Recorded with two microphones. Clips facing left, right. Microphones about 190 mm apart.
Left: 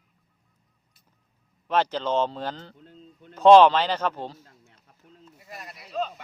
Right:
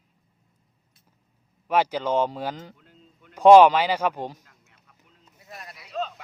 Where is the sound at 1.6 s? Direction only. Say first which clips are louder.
Right 1 dB; 10° right (ahead or behind).